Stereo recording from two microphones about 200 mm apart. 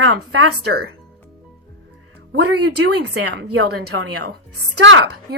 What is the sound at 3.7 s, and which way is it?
Speech, 55° right (ahead or behind).